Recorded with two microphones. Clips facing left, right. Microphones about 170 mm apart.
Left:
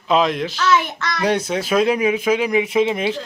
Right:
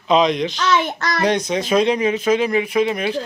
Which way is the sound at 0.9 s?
45° right (ahead or behind).